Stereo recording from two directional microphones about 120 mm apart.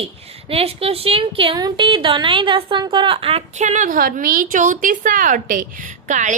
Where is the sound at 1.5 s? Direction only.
35° right (ahead or behind).